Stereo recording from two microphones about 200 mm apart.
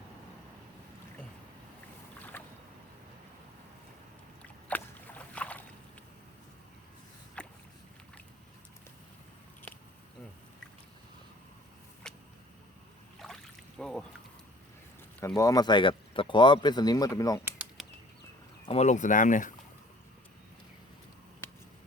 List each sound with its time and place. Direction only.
4.7 s boat: 10° left (ahead or behind)
7.4 s rowboat: 5° left (ahead or behind)
12.1 s a sound: 5° left (ahead or behind)
15.4 s speech: 15° left (ahead or behind)
17.4 s a sound: 5° right (ahead or behind)
18.7 s speech: 35° left (ahead or behind)